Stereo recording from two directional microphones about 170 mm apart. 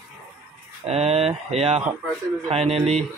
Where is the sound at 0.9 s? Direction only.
40° right (ahead or behind).